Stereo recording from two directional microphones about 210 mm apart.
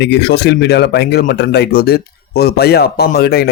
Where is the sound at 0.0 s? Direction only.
55° left (ahead or behind).